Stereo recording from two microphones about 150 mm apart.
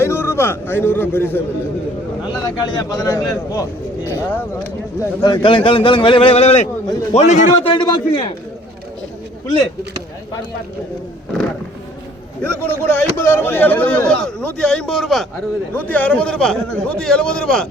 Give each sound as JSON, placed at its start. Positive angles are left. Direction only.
{"t": 0.0, "sound": "a man's voice", "side_deg": 15}
{"t": 5.2, "sound": "a man's voice", "side_deg": 30}
{"t": 7.7, "sound": "a man's voice", "side_deg": 30}
{"t": 12.4, "sound": "a man's voice", "side_deg": 10}